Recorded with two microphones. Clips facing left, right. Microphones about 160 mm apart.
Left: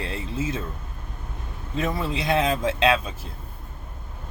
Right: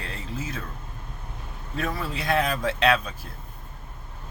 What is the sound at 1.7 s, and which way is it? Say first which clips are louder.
Speech: left 4 dB; 20° left (ahead or behind).